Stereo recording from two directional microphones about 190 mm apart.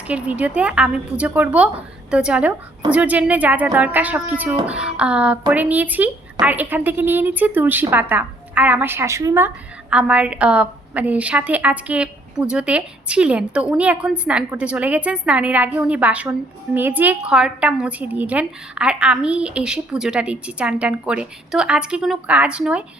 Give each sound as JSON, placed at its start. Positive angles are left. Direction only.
{"t": 0.1, "sound": "a woman's voice", "side_deg": -5}